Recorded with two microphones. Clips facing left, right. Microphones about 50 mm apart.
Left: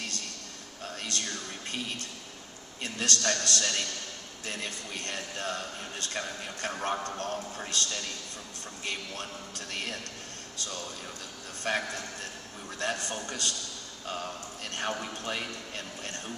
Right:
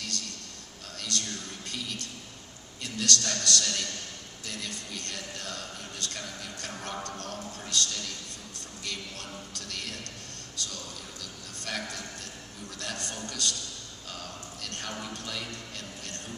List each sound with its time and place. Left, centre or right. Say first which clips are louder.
0.9 s a man's voice: right 1 dB; left
11.6 s a man's voice: left 5 dB; left